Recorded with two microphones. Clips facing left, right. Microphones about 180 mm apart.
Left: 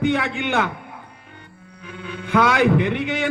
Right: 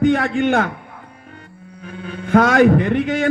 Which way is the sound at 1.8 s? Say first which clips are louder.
Right 3 dB; 45° right (ahead or behind).